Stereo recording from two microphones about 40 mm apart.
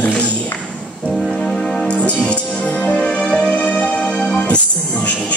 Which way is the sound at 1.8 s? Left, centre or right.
Left.